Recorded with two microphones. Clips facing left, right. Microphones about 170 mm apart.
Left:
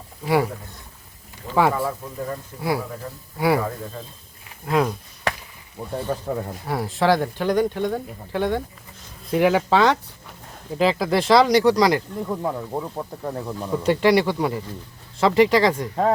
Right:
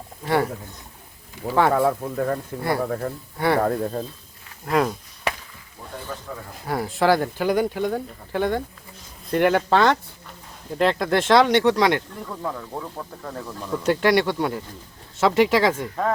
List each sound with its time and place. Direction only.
0.3 s speech: 5° left (ahead or behind)
1.7 s speech: 65° right (ahead or behind)
3.3 s speech: 5° left (ahead or behind)
3.6 s speech: 50° right (ahead or behind)
4.6 s speech: centre (ahead or behind)
6.0 s speech: 35° left (ahead or behind)
6.7 s speech: centre (ahead or behind)
12.2 s speech: 20° left (ahead or behind)
13.8 s speech: centre (ahead or behind)